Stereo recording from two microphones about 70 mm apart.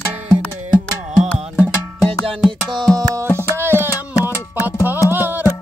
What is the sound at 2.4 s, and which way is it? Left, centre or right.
Music, centre.